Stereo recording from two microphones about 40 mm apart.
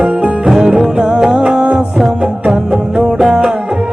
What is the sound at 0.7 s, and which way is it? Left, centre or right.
Music, right.